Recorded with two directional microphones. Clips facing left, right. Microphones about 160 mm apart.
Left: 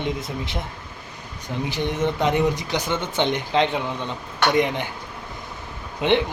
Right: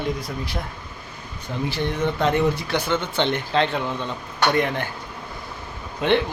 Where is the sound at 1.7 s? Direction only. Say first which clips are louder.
Even; 15° left (ahead or behind).